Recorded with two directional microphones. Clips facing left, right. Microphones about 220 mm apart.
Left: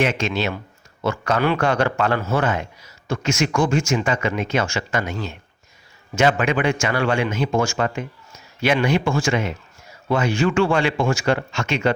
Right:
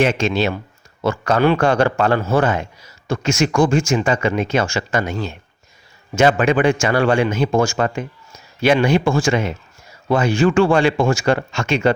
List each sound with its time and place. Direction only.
0.0 s speech: 30° right (ahead or behind)